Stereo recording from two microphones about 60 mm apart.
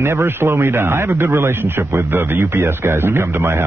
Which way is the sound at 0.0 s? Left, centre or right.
Right.